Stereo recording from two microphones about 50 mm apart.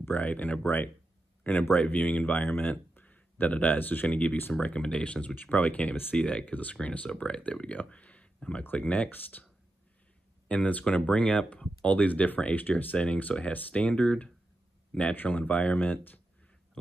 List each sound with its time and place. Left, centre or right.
0.0 s speech: left
1.7 s speech: left
2.9 s a sound: left
4.1 s speech: left
10.5 s speech: left
15.2 s speech: left